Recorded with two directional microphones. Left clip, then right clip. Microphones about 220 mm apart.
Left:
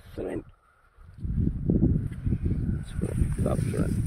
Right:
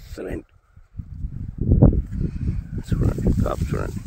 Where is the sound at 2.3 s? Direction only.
20° right (ahead or behind).